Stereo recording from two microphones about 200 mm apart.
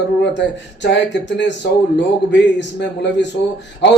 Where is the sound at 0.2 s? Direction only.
60° left (ahead or behind).